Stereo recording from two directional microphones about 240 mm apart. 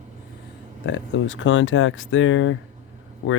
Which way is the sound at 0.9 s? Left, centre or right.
Left.